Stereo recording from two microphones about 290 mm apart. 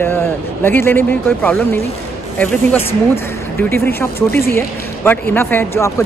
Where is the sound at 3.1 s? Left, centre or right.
Centre.